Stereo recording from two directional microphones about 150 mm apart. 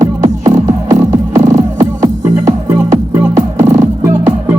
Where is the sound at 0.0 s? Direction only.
20° right (ahead or behind).